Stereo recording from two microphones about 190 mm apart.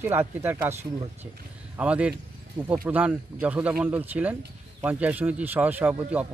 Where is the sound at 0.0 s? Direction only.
10° right (ahead or behind).